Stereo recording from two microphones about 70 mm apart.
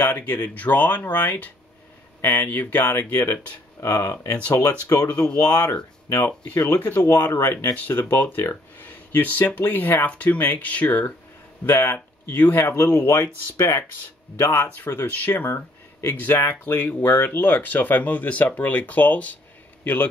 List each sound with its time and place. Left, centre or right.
0.1 s speech: left
3.1 s speech: left
4.9 s speech: left
6.1 s speech: left
11.6 s speech: left
14.4 s a man's voice: left